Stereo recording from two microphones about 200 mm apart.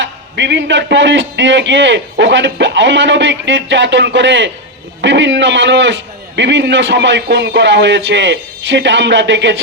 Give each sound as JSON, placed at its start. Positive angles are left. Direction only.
{"t": 0.0, "sound": "a man's voice", "side_deg": -60}